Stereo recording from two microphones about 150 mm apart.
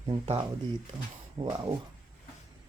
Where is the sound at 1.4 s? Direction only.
25° right (ahead or behind).